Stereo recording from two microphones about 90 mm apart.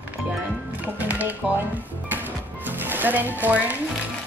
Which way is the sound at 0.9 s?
20° right (ahead or behind).